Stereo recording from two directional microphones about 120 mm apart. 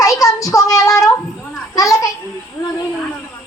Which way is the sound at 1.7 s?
30° left (ahead or behind).